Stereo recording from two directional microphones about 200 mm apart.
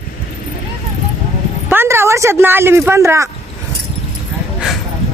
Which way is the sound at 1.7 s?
10° right (ahead or behind).